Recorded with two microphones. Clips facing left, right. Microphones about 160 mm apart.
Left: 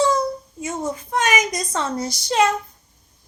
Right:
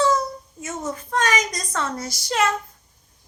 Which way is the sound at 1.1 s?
15° left (ahead or behind).